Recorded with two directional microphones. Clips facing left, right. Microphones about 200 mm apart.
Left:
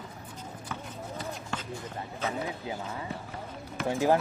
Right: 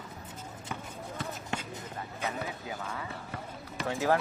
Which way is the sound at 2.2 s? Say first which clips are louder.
Left 3 dB; 20° left (ahead or behind).